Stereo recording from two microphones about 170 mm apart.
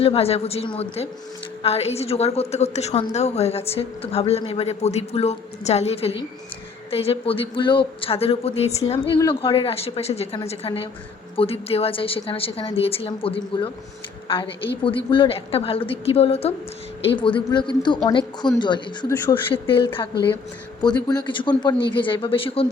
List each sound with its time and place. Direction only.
0.0 s a woman's voice: 35° left (ahead or behind)
21.1 s a man's voice: 25° left (ahead or behind)